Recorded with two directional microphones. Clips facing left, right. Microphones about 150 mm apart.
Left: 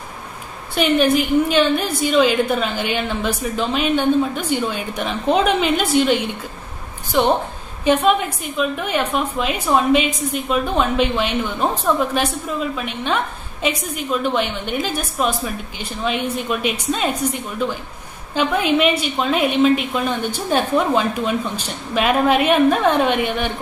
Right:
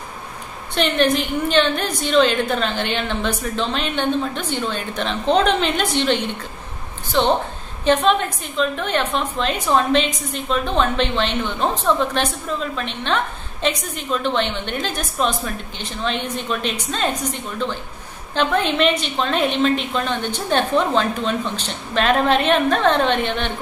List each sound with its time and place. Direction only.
0.7 s a woman's voice: 10° left (ahead or behind)